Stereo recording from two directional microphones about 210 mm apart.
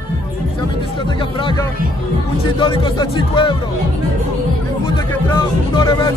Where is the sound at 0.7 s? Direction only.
25° left (ahead or behind).